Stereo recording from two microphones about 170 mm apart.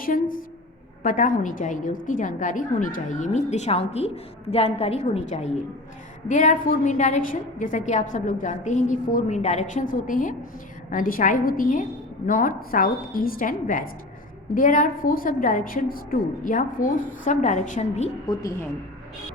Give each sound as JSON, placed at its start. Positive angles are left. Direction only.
{"t": 0.0, "sound": "a sound", "side_deg": 55}
{"t": 1.0, "sound": "a woman's voice", "side_deg": 50}
{"t": 18.3, "sound": "a woman's voice", "side_deg": 20}